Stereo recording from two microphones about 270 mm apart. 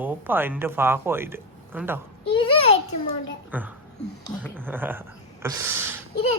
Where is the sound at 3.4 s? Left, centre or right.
Centre.